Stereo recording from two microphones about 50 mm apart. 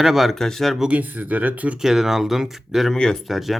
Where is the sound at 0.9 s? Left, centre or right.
Right.